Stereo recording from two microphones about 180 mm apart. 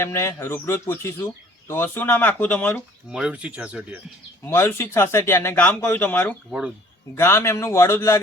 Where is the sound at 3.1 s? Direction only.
5° right (ahead or behind).